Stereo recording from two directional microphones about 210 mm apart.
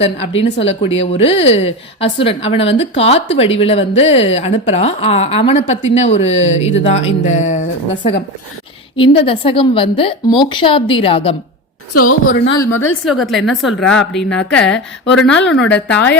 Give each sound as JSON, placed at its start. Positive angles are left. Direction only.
{"t": 0.0, "sound": "a woman's voice", "side_deg": 30}
{"t": 9.2, "sound": "a woman's voice", "side_deg": 25}
{"t": 12.5, "sound": "a woman's voice", "side_deg": 10}
{"t": 13.1, "sound": "a woman's voice", "side_deg": 0}